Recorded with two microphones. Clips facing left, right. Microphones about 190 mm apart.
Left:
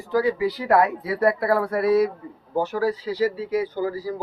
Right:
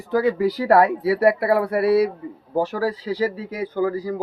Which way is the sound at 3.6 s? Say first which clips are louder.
Right 3 dB; 55° right (ahead or behind).